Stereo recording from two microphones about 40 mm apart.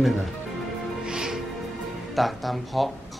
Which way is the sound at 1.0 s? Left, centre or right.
Centre.